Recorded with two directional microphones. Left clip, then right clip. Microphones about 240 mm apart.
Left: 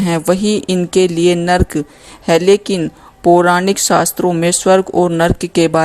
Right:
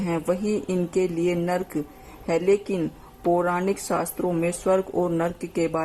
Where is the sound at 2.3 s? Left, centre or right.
Left.